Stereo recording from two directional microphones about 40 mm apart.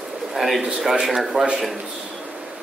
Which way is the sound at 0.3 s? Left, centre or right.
Centre.